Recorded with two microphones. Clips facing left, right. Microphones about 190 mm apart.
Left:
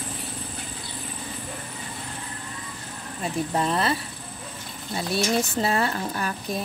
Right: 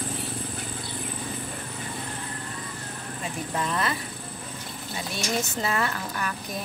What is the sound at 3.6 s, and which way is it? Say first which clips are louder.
Speech: left 3 dB; 30° left (ahead or behind).